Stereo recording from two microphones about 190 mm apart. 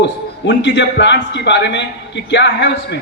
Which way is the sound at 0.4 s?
65° left (ahead or behind).